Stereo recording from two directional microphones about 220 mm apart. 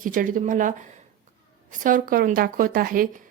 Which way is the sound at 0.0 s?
40° right (ahead or behind).